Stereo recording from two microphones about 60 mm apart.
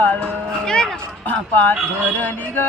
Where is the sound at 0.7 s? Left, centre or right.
Centre.